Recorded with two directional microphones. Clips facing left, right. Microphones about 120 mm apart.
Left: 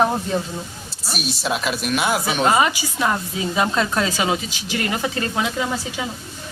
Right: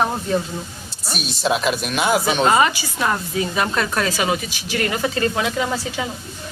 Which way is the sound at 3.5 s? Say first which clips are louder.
Left 4 dB; 20° left (ahead or behind).